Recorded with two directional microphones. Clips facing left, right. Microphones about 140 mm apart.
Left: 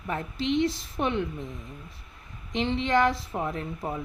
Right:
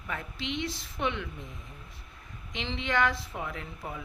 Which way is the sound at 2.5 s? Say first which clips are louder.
Left 6 dB; 35° left (ahead or behind).